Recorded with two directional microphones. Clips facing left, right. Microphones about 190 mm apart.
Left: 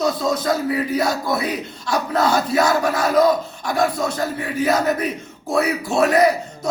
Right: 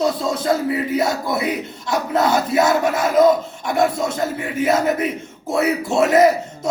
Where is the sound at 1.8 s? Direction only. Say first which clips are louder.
Right 1 dB; 20° right (ahead or behind).